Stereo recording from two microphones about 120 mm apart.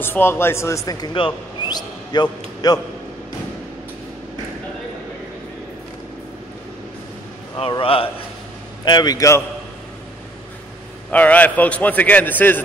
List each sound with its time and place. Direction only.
0.0 s a man's voice: 20° left (ahead or behind)
7.8 s a man's voice: 50° left (ahead or behind)
8.8 s a man's voice: 35° left (ahead or behind)
11.1 s a man's voice: 15° left (ahead or behind)